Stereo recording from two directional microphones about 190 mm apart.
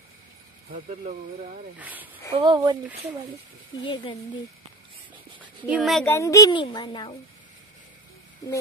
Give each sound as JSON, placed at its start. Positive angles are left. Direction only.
{"t": 0.7, "sound": "speech", "side_deg": -45}
{"t": 1.8, "sound": "speech", "side_deg": -10}
{"t": 2.3, "sound": "speech", "side_deg": -25}
{"t": 3.8, "sound": "a child's voice", "side_deg": 25}
{"t": 5.7, "sound": "speech", "side_deg": 0}
{"t": 6.0, "sound": "a child's voice", "side_deg": 15}